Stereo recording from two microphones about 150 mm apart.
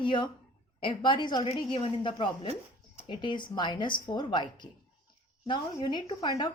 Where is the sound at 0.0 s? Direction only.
35° left (ahead or behind).